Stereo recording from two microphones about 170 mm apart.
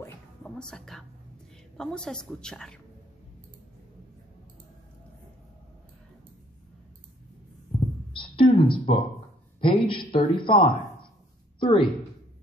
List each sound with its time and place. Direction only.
0.0 s whispering: 5° left (ahead or behind)
1.8 s a woman's voice: 5° left (ahead or behind)
8.1 s a sound: 30° left (ahead or behind)
9.6 s speech: 30° left (ahead or behind)